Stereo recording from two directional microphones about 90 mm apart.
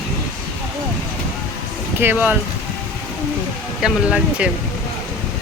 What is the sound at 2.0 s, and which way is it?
Speech, 20° right (ahead or behind).